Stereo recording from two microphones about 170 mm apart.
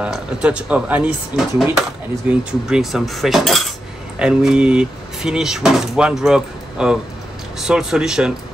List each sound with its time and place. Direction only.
0.0 s speech: 5° right (ahead or behind)